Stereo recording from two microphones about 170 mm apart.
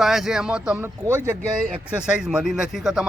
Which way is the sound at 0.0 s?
Centre (ahead or behind).